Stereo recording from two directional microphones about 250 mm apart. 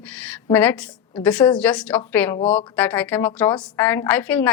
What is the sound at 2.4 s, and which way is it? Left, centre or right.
Speech, left.